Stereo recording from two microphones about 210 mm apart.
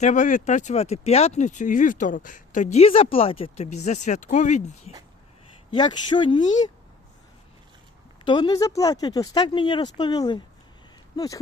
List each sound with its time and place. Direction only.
0.0 s speech: 35° left (ahead or behind)
5.7 s speech: 20° left (ahead or behind)
8.2 s speech: 20° left (ahead or behind)